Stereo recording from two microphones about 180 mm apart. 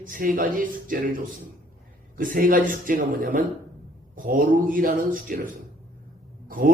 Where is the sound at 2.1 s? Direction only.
50° right (ahead or behind).